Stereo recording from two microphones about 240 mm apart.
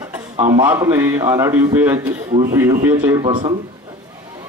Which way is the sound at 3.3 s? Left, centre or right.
Right.